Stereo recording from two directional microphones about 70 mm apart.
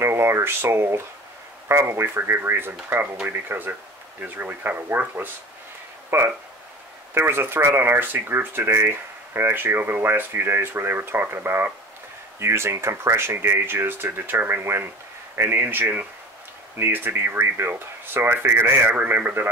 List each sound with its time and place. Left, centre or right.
0.0 s speech: right
18.9 s speech: right